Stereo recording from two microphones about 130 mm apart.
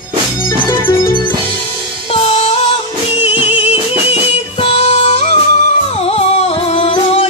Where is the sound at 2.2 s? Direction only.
45° left (ahead or behind).